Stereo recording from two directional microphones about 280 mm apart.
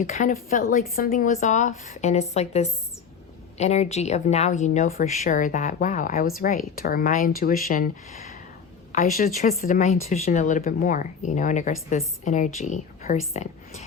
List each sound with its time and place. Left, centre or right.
0.0 s speech: left